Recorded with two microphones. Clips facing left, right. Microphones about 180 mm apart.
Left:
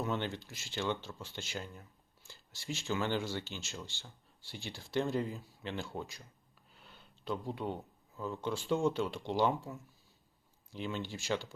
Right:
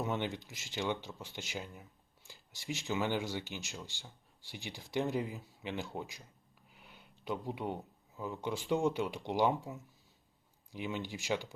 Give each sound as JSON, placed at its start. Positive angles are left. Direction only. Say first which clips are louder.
{"t": 0.0, "sound": "speech", "louder": "even", "side_deg": -15}